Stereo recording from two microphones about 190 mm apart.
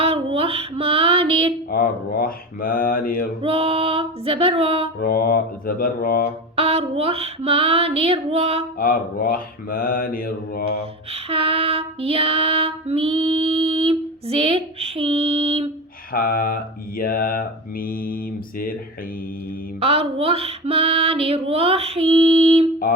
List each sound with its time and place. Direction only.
0.0 s music: 30° right (ahead or behind)
1.7 s mantra: 50° left (ahead or behind)
3.4 s female singing: 30° right (ahead or behind)
4.9 s mantra: 50° left (ahead or behind)
6.6 s female singing: 30° right (ahead or behind)
8.8 s mantra: 50° left (ahead or behind)
11.1 s female singing: 30° right (ahead or behind)
16.1 s mantra: 50° left (ahead or behind)
19.8 s female singing: 30° right (ahead or behind)